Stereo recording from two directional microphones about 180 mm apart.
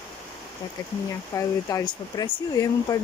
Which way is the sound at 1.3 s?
20° left (ahead or behind).